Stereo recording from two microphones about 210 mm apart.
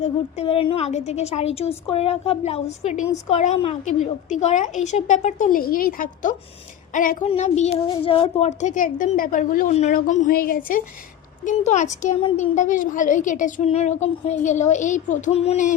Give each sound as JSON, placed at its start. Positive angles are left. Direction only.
{"t": 0.3, "sound": "a woman's voice", "side_deg": 25}